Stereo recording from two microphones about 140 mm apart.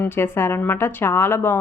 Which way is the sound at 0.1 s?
15° left (ahead or behind).